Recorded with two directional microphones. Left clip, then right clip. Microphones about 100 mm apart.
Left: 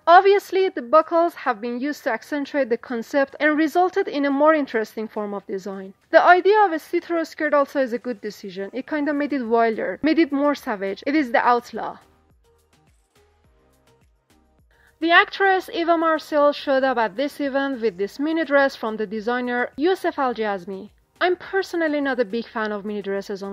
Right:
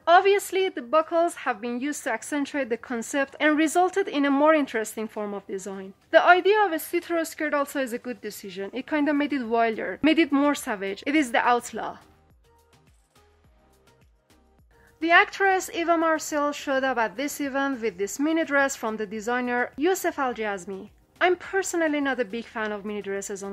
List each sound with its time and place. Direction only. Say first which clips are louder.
0.0 s a woman's voice: left 5 dB; 35° left (ahead or behind); by 12.0 s 20° left (ahead or behind)
15.0 s a woman's voice: left 3 dB; 30° left (ahead or behind)